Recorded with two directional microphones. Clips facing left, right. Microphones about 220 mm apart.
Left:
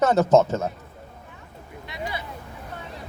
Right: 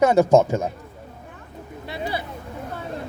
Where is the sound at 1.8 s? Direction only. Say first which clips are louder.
Right 4 dB; 30° right (ahead or behind).